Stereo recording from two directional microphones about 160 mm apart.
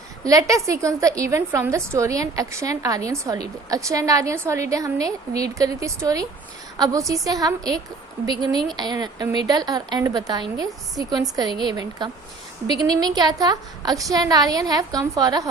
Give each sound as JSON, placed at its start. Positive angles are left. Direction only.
{"t": 0.3, "sound": "a woman's voice", "side_deg": -20}